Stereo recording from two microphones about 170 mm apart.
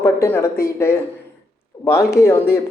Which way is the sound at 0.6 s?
15° left (ahead or behind).